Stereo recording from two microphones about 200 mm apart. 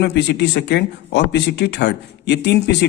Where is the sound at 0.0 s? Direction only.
60° left (ahead or behind).